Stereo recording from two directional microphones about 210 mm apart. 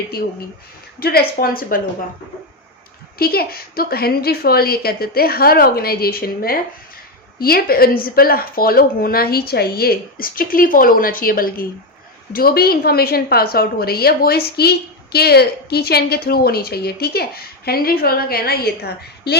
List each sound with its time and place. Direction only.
0.9 s a woman's voice: 45° left (ahead or behind)
3.2 s a woman's voice: 45° left (ahead or behind)